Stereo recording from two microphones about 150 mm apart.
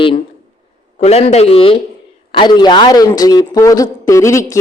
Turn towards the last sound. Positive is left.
turn(degrees=20)  # may be behind; listen again after turning